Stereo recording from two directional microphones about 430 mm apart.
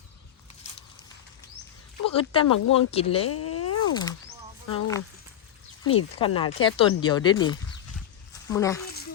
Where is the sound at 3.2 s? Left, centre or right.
Left.